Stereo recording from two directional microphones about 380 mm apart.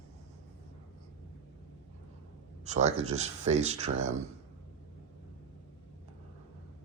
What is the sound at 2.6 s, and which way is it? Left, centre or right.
Speech, centre.